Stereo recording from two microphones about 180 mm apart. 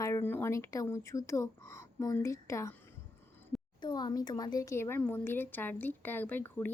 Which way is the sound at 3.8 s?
25° left (ahead or behind).